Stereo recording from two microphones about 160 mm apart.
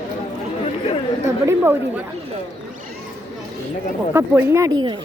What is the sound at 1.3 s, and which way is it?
Speech, 15° right (ahead or behind).